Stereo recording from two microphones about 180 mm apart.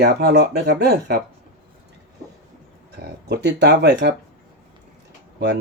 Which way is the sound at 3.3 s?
70° right (ahead or behind).